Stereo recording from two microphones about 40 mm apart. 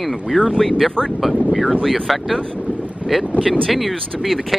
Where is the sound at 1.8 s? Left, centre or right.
Centre.